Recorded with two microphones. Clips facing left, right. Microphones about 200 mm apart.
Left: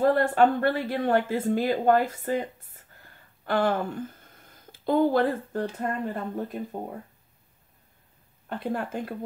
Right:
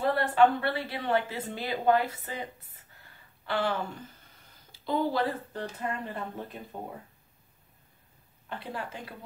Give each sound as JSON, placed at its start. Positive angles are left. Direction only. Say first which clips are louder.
{"t": 0.0, "sound": "speech", "louder": "left 3 dB", "side_deg": 45}
{"t": 8.5, "sound": "speech", "louder": "left 8 dB", "side_deg": 50}